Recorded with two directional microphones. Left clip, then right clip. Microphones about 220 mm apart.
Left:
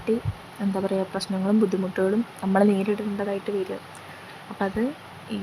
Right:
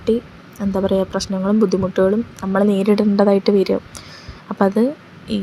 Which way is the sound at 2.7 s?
20° right (ahead or behind).